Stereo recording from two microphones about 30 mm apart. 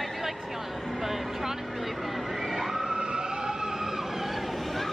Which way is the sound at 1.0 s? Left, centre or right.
Centre.